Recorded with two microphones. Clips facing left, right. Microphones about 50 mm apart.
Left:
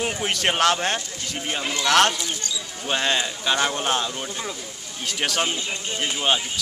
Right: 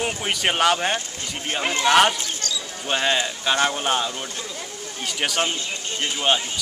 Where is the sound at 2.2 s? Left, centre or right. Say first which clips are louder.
Right 1 dB; centre.